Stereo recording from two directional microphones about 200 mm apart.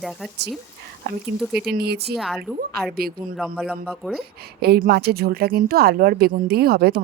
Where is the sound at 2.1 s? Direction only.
Centre (ahead or behind).